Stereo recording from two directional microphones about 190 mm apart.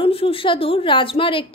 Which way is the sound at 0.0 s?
30° left (ahead or behind).